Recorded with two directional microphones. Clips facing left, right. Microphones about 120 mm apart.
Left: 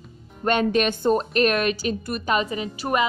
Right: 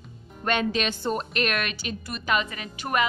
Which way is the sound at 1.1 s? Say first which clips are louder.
Left 7 dB; 35° left (ahead or behind).